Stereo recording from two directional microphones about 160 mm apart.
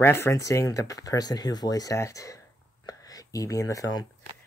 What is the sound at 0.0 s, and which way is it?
Speech, 15° left (ahead or behind).